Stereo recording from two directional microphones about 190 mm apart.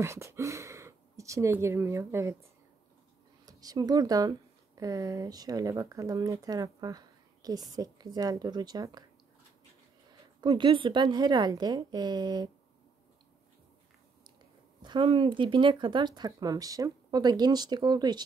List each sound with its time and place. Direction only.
0.0 s speech: 15° right (ahead or behind)
3.4 s speech: 20° right (ahead or behind)
10.4 s speech: 25° right (ahead or behind)
14.8 s speech: 25° right (ahead or behind)